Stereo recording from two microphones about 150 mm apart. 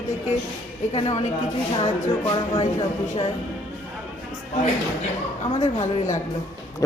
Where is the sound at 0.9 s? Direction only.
45° left (ahead or behind).